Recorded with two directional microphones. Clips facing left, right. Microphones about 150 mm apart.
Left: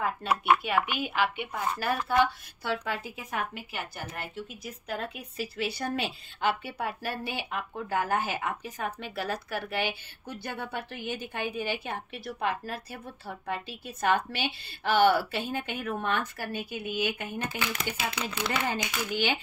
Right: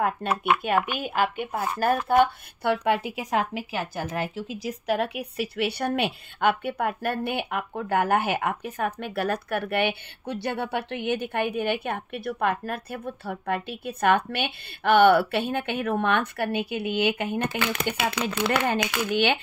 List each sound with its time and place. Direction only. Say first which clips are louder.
0.0 s speech: right 4 dB; 55° right (ahead or behind)